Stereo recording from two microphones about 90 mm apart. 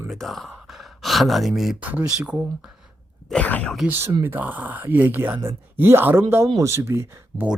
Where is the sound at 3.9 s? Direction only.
25° right (ahead or behind).